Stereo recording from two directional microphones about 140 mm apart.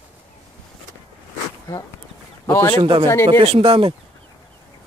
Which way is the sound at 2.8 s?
40° right (ahead or behind).